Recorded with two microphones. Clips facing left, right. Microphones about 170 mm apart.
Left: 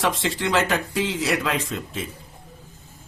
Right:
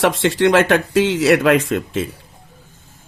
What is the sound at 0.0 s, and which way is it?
Speech, 70° right (ahead or behind).